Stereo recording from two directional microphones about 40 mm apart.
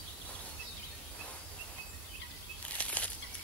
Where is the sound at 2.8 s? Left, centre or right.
Left.